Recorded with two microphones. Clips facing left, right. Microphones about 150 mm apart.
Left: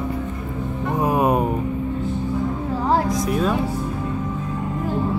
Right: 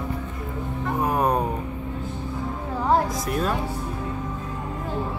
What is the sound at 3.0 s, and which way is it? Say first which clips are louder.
Music: left 5 dB; centre (ahead or behind).